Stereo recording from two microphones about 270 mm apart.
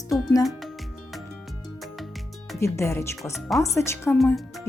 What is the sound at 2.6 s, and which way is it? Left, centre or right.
A woman's voice, centre.